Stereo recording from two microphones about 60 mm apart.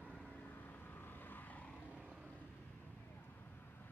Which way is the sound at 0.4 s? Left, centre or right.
Left.